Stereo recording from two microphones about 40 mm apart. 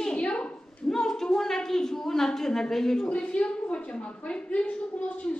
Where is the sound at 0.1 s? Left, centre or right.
Left.